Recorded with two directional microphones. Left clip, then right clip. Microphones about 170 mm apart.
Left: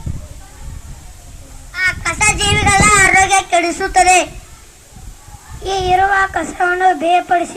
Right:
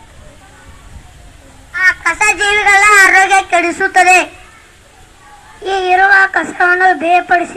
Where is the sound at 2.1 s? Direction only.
60° left (ahead or behind).